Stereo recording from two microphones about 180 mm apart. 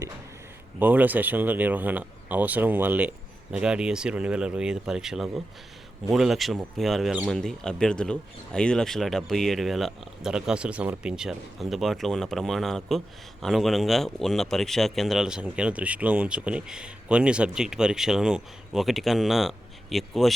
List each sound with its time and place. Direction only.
0.8 s speech: 10° right (ahead or behind)